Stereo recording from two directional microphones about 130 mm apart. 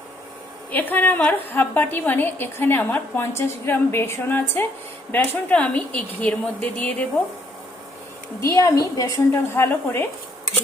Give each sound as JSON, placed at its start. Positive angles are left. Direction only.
{"t": 0.7, "sound": "a woman's voice", "side_deg": 15}
{"t": 8.4, "sound": "a woman's voice", "side_deg": 25}